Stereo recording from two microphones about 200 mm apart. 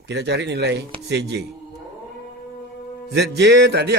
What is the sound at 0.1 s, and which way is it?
Speech, 55° right (ahead or behind).